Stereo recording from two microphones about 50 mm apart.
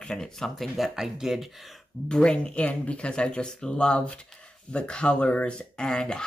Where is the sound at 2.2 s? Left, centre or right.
Left.